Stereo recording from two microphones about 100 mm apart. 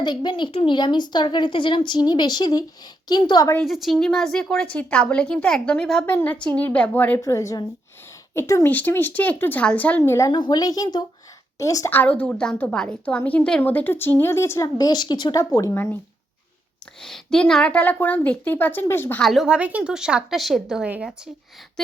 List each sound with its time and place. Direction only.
0.0 s speech: 45° left (ahead or behind)
3.6 s a woman's voice: centre (ahead or behind); by 7.2 s 15° left (ahead or behind)
7.2 s a woman's voice: 30° left (ahead or behind)
8.7 s a woman's voice: 20° left (ahead or behind)
10.0 s a woman's voice: 30° left (ahead or behind)
10.3 s a woman's voice: 45° left (ahead or behind)
11.9 s a woman's voice: 15° left (ahead or behind)
14.8 s speech: 40° left (ahead or behind)
15.5 s a woman's voice: 30° left (ahead or behind)
17.0 s a woman's voice: 5° left (ahead or behind); by 19.2 s 25° left (ahead or behind)
19.2 s speech: centre (ahead or behind)
19.5 s a woman's voice: 15° right (ahead or behind)